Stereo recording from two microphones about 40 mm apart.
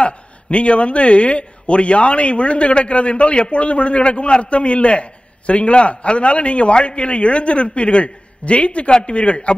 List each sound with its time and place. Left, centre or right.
0.0 s a man's voice: left